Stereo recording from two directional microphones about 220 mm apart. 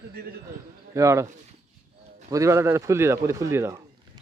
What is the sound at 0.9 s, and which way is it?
Speech, 15° right (ahead or behind).